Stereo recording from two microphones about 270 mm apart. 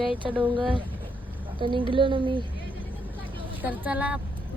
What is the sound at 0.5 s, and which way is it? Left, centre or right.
Speech, centre.